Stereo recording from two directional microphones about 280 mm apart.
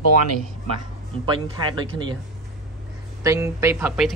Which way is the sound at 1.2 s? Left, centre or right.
Centre.